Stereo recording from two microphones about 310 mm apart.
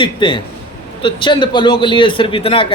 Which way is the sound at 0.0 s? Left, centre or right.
Centre.